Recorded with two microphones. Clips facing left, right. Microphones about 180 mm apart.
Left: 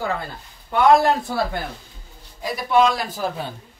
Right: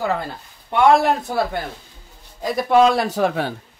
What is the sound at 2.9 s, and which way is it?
Speech, 75° right (ahead or behind).